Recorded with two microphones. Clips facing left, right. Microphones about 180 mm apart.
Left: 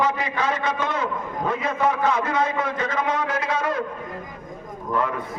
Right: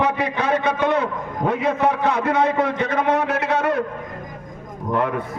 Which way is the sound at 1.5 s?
65° right (ahead or behind).